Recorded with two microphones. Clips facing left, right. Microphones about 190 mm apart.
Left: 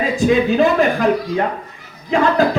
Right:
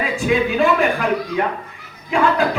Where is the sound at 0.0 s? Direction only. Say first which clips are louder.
Left 4 dB; 40° left (ahead or behind).